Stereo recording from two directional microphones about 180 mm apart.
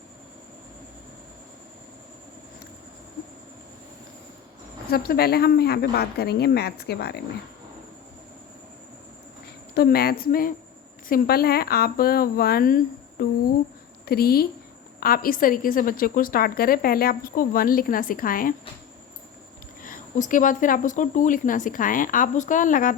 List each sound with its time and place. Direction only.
4.9 s speech: 60° left (ahead or behind)
9.7 s a woman's voice: 60° left (ahead or behind)
19.8 s a woman's voice: 45° left (ahead or behind)